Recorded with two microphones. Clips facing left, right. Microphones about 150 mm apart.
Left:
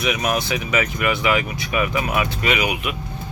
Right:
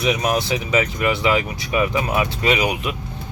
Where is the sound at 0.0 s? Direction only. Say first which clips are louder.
Right 2 dB; 25° right (ahead or behind).